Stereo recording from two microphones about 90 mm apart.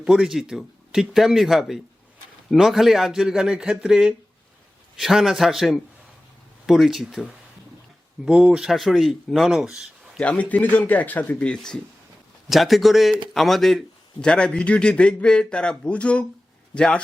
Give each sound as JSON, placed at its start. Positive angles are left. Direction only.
{"t": 0.0, "sound": "speech", "side_deg": -5}
{"t": 10.2, "sound": "a man's voice", "side_deg": 15}